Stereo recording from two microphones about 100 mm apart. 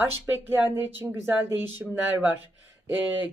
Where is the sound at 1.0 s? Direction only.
35° right (ahead or behind).